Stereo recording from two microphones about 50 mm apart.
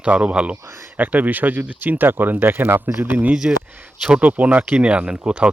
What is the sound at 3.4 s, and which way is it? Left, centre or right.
Speech, right.